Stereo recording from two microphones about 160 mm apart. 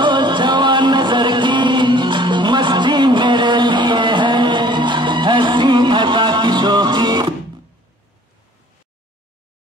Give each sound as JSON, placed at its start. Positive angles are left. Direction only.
{"t": 0.0, "sound": "music", "side_deg": -30}